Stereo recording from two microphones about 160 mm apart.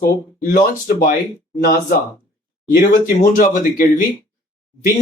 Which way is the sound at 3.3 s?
55° left (ahead or behind).